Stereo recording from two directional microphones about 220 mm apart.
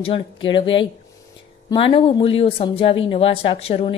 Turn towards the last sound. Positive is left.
turn(degrees=25)  # may be behind; listen again after turning